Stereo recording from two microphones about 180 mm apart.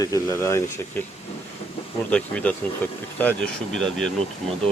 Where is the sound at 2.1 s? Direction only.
5° left (ahead or behind).